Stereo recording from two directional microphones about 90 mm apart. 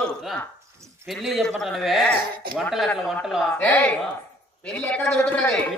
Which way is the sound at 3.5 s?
20° left (ahead or behind).